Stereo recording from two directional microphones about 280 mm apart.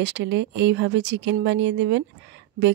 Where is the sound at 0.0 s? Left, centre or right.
Right.